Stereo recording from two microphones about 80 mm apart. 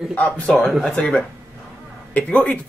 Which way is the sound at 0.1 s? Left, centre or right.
Centre.